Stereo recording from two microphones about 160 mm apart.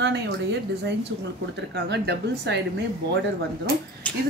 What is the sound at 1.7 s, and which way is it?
Speech, 90° right.